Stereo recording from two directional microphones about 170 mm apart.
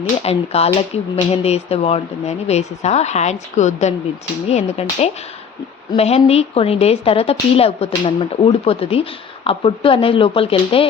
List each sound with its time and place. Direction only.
0.3 s a woman's voice: 35° left (ahead or behind)